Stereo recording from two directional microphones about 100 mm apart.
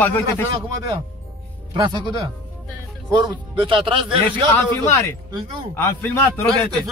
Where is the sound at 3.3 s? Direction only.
60° right (ahead or behind).